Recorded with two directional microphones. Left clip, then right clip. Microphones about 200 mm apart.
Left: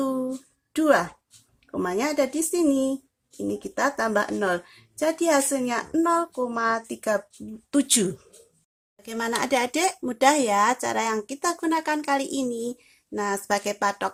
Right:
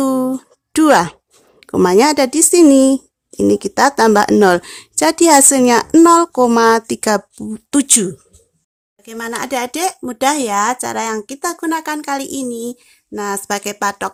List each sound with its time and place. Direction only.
0.0 s a sound: 50° right (ahead or behind)
0.7 s speech: 45° right (ahead or behind)
7.7 s speech: 30° right (ahead or behind)
9.0 s speech: 10° right (ahead or behind)